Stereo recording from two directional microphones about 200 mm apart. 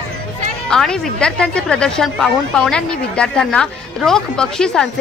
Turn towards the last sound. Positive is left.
turn(degrees=5)  # may be behind; listen again after turning